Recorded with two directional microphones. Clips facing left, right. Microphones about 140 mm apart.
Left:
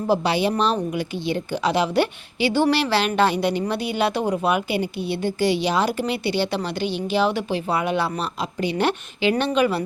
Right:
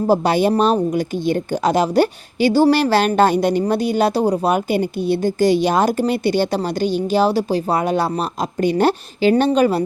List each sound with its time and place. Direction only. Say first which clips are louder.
0.1 s a woman's voice: right 4 dB; 45° right (ahead or behind)